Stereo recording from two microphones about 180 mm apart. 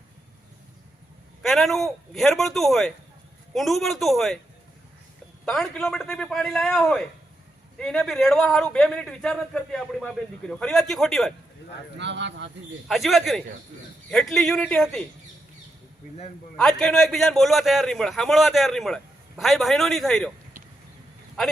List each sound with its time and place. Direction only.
1.4 s a man's voice: centre (ahead or behind)
5.5 s a man's voice: centre (ahead or behind)
11.9 s speech: 75° right (ahead or behind)
12.9 s a man's voice: centre (ahead or behind)
16.6 s a man's voice: 5° left (ahead or behind)